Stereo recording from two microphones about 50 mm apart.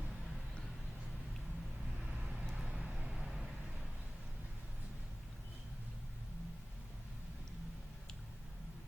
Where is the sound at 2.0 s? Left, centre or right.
Right.